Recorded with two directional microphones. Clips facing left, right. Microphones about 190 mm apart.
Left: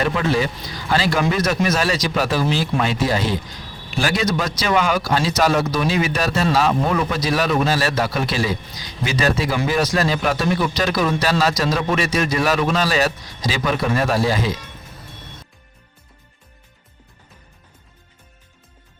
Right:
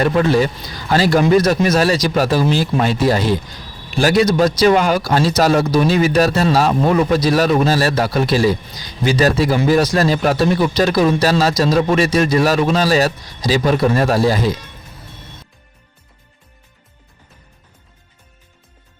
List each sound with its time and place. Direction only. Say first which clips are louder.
0.0 s speech: right 5 dB; 40° right (ahead or behind)